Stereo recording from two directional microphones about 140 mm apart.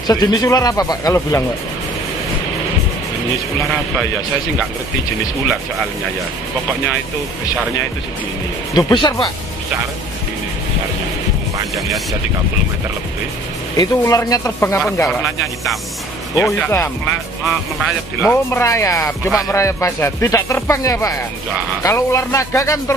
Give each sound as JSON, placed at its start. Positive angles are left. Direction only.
{"t": 0.0, "sound": "speech", "side_deg": 25}
{"t": 8.7, "sound": "speech", "side_deg": 30}
{"t": 13.7, "sound": "speech", "side_deg": 25}
{"t": 15.4, "sound": "speech", "side_deg": 0}
{"t": 16.7, "sound": "speech", "side_deg": 20}
{"t": 17.5, "sound": "speech", "side_deg": 0}
{"t": 18.3, "sound": "speech", "side_deg": 20}